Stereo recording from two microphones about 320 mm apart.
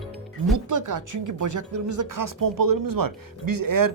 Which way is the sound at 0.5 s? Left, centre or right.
Right.